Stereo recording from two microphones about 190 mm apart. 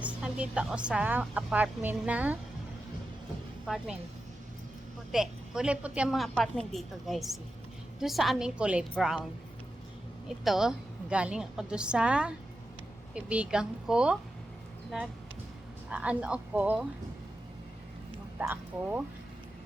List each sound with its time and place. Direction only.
0.0 s speech: 5° right (ahead or behind)
5.1 s a woman's voice: 5° right (ahead or behind)
10.2 s a woman's voice: centre (ahead or behind)
15.9 s speech: 5° right (ahead or behind)
18.3 s speech: 10° right (ahead or behind)